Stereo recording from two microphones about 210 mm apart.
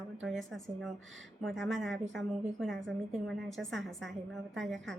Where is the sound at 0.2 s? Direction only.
Centre (ahead or behind).